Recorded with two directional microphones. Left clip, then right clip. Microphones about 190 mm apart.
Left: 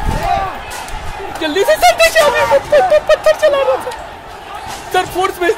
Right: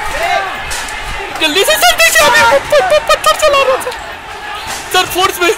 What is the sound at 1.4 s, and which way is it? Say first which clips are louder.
Speech: right 2 dB; 15° left (ahead or behind).